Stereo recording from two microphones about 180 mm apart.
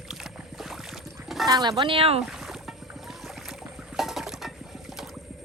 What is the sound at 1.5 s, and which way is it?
Speech, 20° right (ahead or behind).